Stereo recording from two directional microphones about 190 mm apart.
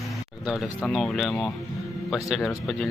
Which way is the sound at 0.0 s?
Centre (ahead or behind).